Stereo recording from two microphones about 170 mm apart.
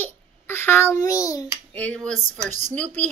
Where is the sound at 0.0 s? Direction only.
15° left (ahead or behind).